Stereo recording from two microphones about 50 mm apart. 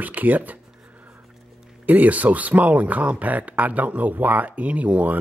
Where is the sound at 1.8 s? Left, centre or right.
Right.